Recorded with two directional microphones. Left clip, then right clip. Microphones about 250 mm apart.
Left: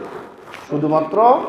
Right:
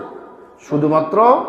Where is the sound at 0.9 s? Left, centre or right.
Right.